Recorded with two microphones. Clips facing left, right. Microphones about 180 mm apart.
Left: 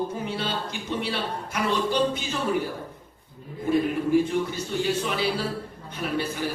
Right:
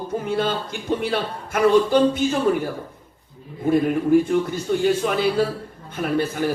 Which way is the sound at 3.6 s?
50° right (ahead or behind).